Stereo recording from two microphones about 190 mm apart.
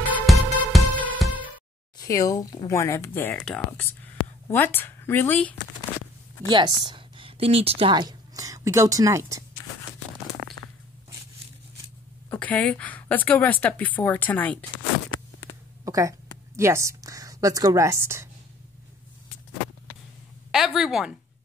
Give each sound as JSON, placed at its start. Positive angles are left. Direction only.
{"t": 0.0, "sound": "music", "side_deg": -10}
{"t": 2.0, "sound": "a woman's voice", "side_deg": 15}
{"t": 6.5, "sound": "a woman's voice", "side_deg": -25}
{"t": 12.3, "sound": "a woman's voice", "side_deg": 10}
{"t": 15.8, "sound": "a woman's voice", "side_deg": -15}
{"t": 20.5, "sound": "a sound", "side_deg": 0}